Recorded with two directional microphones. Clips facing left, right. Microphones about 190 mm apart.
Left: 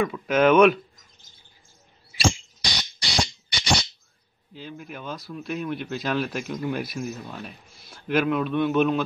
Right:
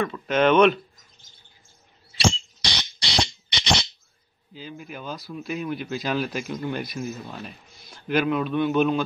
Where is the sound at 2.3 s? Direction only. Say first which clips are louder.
Right 1 dB; 10° left (ahead or behind).